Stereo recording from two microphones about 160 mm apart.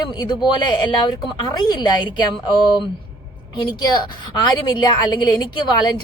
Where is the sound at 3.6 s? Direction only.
30° left (ahead or behind).